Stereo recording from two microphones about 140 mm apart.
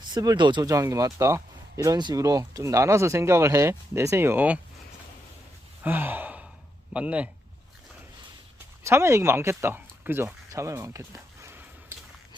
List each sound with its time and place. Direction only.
0.1 s speech: 30° right (ahead or behind); by 4.6 s 10° right (ahead or behind)
5.8 s sigh: 15° right (ahead or behind)
6.9 s speech: 10° right (ahead or behind)
8.8 s speech: 20° right (ahead or behind)
11.4 s a sound: 20° right (ahead or behind)